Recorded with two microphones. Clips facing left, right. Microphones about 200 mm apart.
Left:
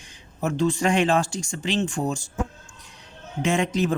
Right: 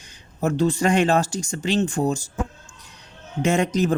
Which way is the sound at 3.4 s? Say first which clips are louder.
Right 3 dB; 40° right (ahead or behind).